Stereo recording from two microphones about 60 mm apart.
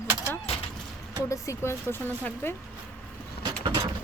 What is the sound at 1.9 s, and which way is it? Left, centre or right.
Speech, left.